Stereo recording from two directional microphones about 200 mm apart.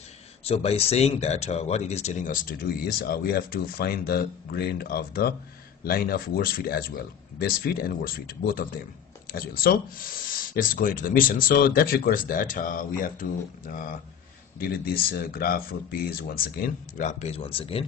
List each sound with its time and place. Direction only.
0.5 s speech: 30° left (ahead or behind); by 16.5 s 50° left (ahead or behind)
17.0 s speech: 35° left (ahead or behind)